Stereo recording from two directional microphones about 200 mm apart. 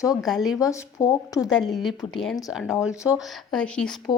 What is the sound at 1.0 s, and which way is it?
Speech, 15° left (ahead or behind).